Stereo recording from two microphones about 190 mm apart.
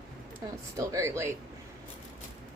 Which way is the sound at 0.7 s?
15° right (ahead or behind).